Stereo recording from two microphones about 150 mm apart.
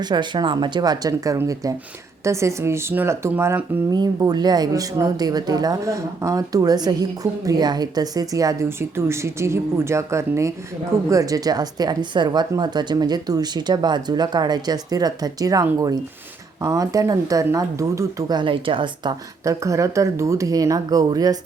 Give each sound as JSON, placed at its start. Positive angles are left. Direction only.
{"t": 0.0, "sound": "speech", "side_deg": -30}
{"t": 19.5, "sound": "speech", "side_deg": -20}